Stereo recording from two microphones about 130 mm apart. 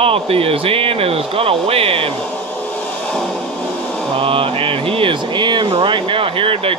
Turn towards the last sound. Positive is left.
turn(degrees=-45)  # may be behind; listen again after turning